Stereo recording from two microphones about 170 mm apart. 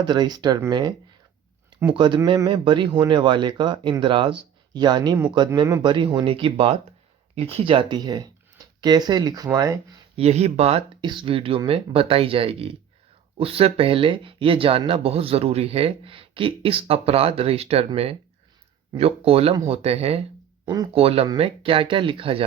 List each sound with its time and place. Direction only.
0.0 s speech: 25° right (ahead or behind)
10.2 s speech: 40° right (ahead or behind)
20.7 s speech: 25° right (ahead or behind)
21.0 s speech: 35° right (ahead or behind)